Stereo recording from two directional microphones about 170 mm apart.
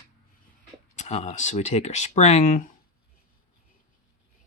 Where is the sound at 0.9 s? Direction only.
40° left (ahead or behind).